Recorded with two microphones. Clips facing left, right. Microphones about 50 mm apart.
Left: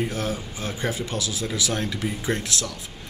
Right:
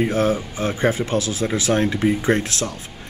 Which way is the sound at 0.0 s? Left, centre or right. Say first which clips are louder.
Right 8 dB; right.